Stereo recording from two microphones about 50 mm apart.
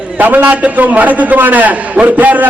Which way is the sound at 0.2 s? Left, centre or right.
Right.